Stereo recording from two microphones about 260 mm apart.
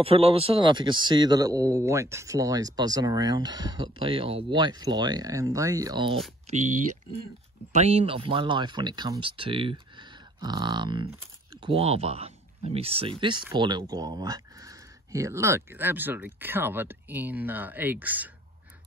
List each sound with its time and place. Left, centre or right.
0.0 s a man's voice: right
7.7 s a man's voice: right; by 18.3 s centre